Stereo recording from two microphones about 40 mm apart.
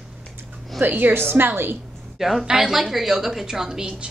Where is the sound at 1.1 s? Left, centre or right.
Right.